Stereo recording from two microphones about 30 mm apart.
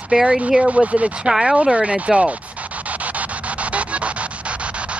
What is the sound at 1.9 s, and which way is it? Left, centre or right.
Speech, right.